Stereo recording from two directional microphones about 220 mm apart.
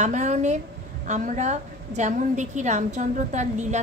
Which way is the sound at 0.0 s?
30° right (ahead or behind).